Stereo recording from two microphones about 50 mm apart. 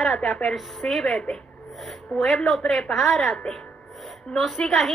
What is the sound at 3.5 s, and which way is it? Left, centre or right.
Speech, centre.